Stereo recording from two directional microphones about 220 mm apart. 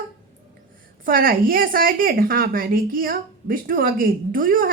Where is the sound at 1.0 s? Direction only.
40° right (ahead or behind).